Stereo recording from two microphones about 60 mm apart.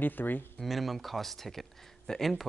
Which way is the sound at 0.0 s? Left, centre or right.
Left.